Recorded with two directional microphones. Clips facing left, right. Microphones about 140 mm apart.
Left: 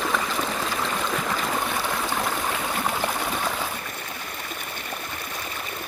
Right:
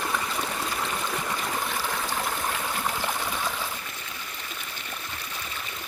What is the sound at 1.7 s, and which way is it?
Stream, 65° left (ahead or behind).